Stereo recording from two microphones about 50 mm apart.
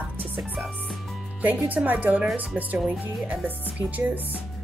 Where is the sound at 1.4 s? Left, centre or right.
Right.